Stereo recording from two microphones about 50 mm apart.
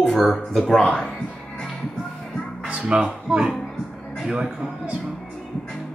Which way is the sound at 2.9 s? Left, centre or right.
Centre.